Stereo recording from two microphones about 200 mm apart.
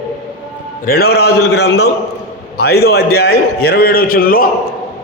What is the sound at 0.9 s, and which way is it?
A man's voice, 50° left (ahead or behind).